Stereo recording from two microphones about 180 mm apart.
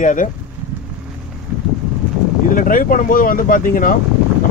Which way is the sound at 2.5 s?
50° left (ahead or behind).